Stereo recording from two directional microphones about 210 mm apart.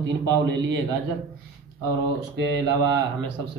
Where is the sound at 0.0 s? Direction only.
55° right (ahead or behind).